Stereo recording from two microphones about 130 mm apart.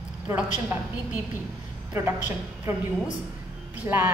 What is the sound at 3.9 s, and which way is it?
Speech, 20° right (ahead or behind).